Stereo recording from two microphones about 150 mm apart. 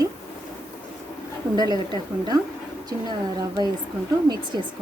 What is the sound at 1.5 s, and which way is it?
Speech, 25° right (ahead or behind).